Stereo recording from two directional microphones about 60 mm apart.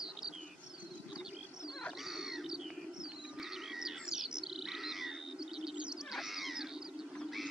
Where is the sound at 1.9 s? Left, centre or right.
Centre.